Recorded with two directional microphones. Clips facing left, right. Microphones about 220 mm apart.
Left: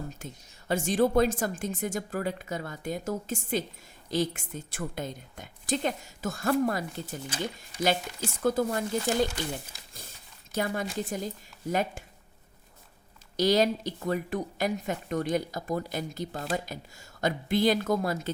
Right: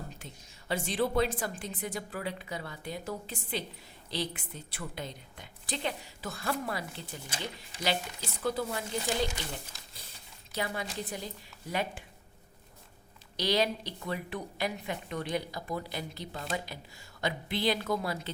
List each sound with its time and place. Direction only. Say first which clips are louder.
0.2 s a woman's voice: left 6 dB; 45° left (ahead or behind)
10.5 s a woman's voice: left 5 dB; 45° left (ahead or behind)
13.3 s a woman's voice: left 6 dB; 45° left (ahead or behind)